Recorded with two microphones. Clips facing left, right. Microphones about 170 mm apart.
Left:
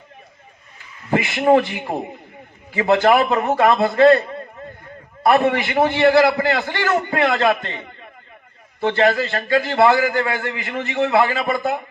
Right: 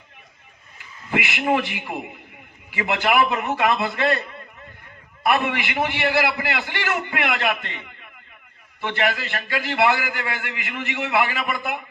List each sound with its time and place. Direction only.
1.1 s a man's voice: 35° left (ahead or behind)